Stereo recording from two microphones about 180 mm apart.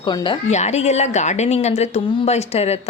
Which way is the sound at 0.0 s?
25° left (ahead or behind).